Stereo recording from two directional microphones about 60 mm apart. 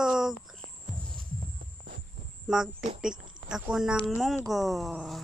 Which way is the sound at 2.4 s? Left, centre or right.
Centre.